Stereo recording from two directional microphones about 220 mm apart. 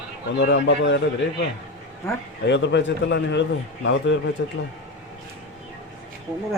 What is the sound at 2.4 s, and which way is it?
A man's voice, 50° left (ahead or behind).